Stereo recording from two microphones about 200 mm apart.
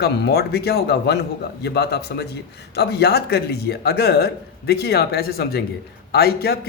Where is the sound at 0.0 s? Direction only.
50° left (ahead or behind).